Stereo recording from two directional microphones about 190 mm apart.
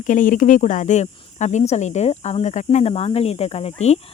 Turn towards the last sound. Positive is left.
turn(degrees=35)  # may be behind; listen again after turning